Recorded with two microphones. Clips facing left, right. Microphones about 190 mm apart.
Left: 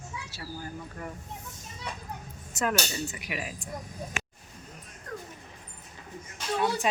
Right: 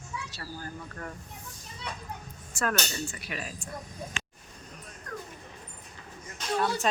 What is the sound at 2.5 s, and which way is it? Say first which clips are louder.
Speech: left 2 dB; 20° left (ahead or behind).